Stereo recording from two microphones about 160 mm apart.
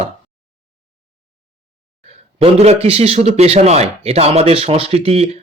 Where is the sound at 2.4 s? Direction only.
40° right (ahead or behind).